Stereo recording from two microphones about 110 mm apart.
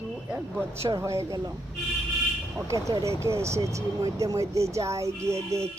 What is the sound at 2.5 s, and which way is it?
Speech, 30° right (ahead or behind).